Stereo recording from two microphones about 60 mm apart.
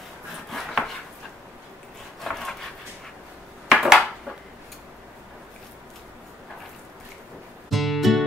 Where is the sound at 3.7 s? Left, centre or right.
Centre.